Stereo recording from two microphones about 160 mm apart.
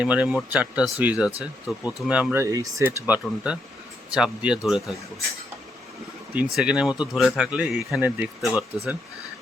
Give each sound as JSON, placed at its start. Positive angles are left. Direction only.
{"t": 0.0, "sound": "speech", "side_deg": -10}
{"t": 6.3, "sound": "speech", "side_deg": -5}